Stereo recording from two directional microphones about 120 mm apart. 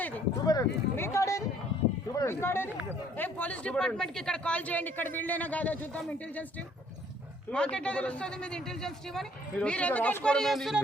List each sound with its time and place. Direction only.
0.4 s a man's voice: 25° left (ahead or behind)
7.5 s a man's voice: 10° left (ahead or behind)
10.3 s speech: centre (ahead or behind)